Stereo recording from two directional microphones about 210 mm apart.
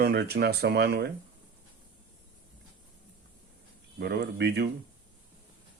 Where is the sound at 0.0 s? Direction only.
50° right (ahead or behind).